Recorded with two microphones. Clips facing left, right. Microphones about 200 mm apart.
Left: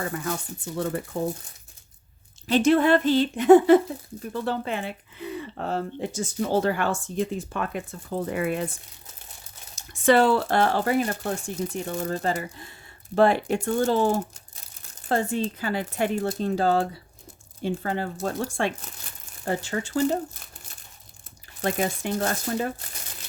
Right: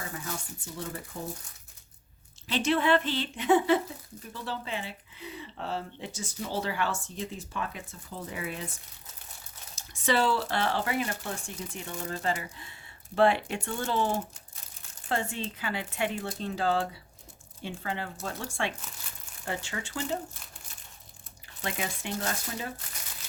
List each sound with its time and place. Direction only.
0.0 s speech: 60° left (ahead or behind)
2.5 s speech: 45° left (ahead or behind)
9.7 s speech: 55° left (ahead or behind)
21.6 s speech: 45° left (ahead or behind)